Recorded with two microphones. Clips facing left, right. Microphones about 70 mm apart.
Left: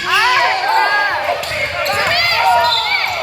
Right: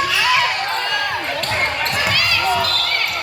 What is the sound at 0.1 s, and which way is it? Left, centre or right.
Basketball bounce, left.